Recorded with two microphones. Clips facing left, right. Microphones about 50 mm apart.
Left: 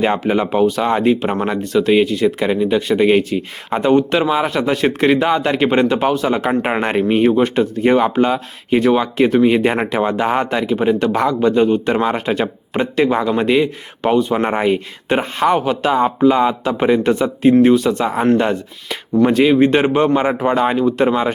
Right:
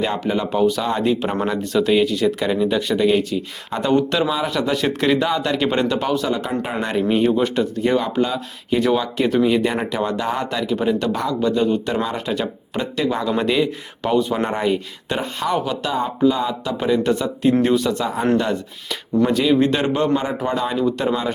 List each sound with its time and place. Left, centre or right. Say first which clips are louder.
0.0 s speech: left 5 dB; left
0.6 s a man's voice: left 2 dB; left
1.2 s a man's voice: left 3 dB; centre
3.1 s speech: left 4 dB; left
3.8 s a man's voice: left 4 dB; centre
4.2 s a man's voice: left 4 dB; left
6.2 s a man's voice: left 6 dB; left
9.6 s speech: left 5 dB; left
10.0 s a man's voice: left 6 dB; left
10.2 s a man's voice: left 5 dB; left
14.2 s speech: left 2 dB; centre
14.5 s speech: left 4 dB; left
17.5 s speech: left 6 dB; centre
17.9 s speech: left 4 dB; left